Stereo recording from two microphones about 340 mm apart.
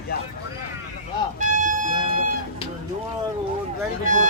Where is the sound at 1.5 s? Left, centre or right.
Right.